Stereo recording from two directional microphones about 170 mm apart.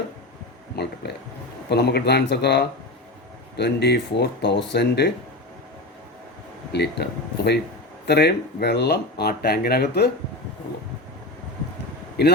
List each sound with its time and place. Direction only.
1.0 s a sound: 75° left (ahead or behind)
1.7 s speech: 75° left (ahead or behind)
6.7 s speech: 75° left (ahead or behind)
12.2 s speech: 70° left (ahead or behind)